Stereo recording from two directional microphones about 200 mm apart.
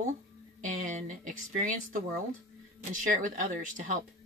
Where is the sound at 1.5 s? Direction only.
40° right (ahead or behind).